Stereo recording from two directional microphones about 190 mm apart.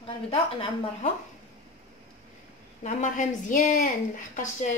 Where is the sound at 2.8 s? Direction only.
40° left (ahead or behind).